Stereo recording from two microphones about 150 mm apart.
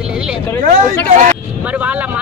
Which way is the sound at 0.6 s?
65° right (ahead or behind).